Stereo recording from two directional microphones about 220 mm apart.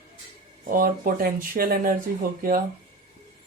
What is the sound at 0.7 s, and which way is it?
Speech, 40° right (ahead or behind).